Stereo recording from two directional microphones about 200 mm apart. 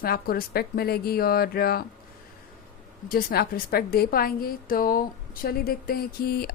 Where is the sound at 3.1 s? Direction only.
50° left (ahead or behind).